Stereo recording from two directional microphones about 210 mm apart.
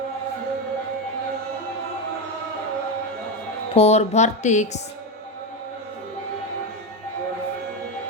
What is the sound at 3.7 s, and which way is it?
Speech, 30° left (ahead or behind).